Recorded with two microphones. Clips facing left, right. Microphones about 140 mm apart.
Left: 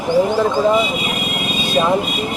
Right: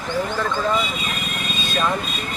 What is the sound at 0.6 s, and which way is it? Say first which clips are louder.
Speech: left 7 dB; 20° left (ahead or behind).